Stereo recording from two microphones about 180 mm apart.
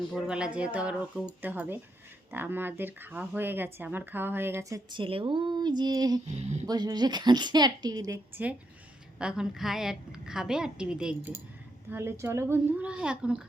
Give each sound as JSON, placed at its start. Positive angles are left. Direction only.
{"t": 0.1, "sound": "speech", "side_deg": -5}
{"t": 4.9, "sound": "a woman's voice", "side_deg": -30}
{"t": 8.4, "sound": "a woman's voice", "side_deg": -10}